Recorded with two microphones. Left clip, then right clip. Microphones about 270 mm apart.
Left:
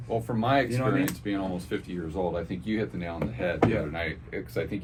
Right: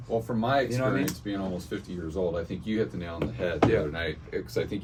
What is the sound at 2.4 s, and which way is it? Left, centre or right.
Speech, centre.